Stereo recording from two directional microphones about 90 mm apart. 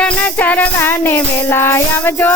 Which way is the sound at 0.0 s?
20° left (ahead or behind).